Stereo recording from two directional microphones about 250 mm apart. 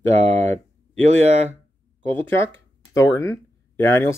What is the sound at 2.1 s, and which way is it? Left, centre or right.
Speech, centre.